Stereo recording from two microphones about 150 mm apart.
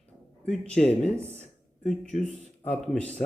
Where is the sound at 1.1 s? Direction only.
15° right (ahead or behind).